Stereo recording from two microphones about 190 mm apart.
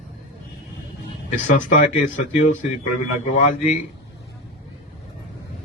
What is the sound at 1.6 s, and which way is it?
Speech, 40° left (ahead or behind).